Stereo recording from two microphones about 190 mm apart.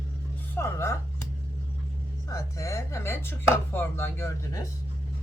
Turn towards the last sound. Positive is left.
turn(degrees=15)  # may be behind; listen again after turning